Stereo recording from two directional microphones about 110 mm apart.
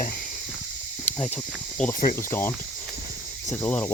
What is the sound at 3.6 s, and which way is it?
Speech, 20° left (ahead or behind).